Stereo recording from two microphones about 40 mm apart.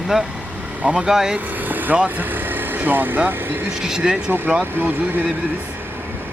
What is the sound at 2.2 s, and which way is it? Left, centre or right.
Speech, right.